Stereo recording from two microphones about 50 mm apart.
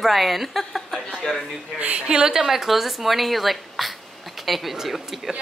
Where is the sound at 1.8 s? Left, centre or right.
Right.